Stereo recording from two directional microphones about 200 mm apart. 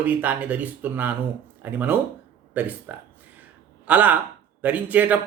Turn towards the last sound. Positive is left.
turn(degrees=-10)  # may be behind; listen again after turning